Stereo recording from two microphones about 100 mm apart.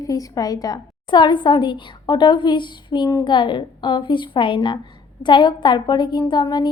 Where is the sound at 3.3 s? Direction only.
55° left (ahead or behind).